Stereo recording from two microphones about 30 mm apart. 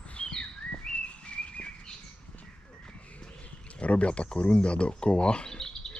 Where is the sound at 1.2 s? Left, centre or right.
Left.